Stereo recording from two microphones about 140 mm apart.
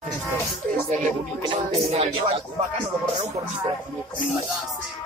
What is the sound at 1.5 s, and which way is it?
Speech, 40° right (ahead or behind).